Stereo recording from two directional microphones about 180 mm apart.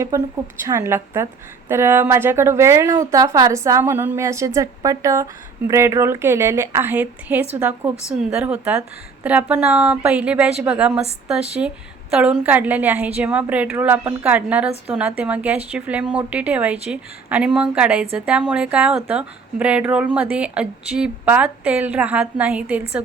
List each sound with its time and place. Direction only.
0.7 s a woman's voice: 15° right (ahead or behind)